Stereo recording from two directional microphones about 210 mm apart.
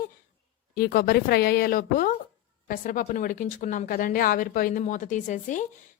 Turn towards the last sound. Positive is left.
turn(degrees=35)  # may be behind; listen again after turning